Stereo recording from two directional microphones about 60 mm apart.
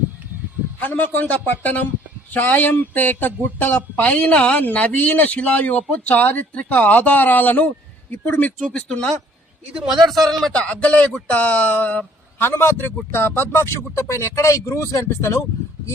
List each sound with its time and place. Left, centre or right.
0.8 s speech: left
8.7 s speech: centre
10.1 s speech: centre
10.5 s speech: centre
12.4 s a man's voice: left